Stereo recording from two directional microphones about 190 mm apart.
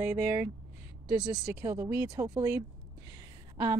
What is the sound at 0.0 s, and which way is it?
A woman's voice, 10° right (ahead or behind).